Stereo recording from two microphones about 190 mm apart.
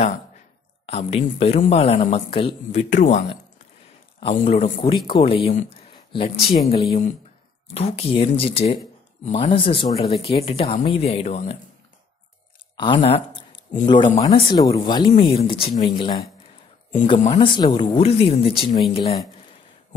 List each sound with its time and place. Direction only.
0.8 s speech: 30° left (ahead or behind)
4.8 s speech: 25° left (ahead or behind)
9.5 s speech: 25° left (ahead or behind)
12.7 s speech: 25° left (ahead or behind)